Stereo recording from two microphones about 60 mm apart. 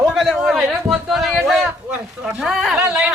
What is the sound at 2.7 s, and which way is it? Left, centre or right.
Speech, centre.